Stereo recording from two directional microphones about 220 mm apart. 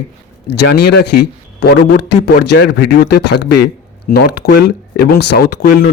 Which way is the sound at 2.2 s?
50° left (ahead or behind).